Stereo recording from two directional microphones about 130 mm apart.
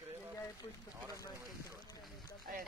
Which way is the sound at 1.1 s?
25° left (ahead or behind).